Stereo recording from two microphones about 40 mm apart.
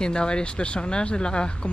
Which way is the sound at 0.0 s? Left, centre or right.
Left.